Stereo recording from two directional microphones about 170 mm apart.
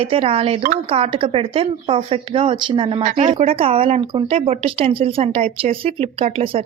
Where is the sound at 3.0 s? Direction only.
45° right (ahead or behind).